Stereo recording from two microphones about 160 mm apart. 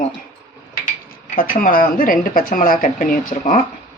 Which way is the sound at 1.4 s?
60° left (ahead or behind).